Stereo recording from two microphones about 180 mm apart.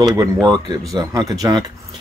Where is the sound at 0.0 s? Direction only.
20° right (ahead or behind).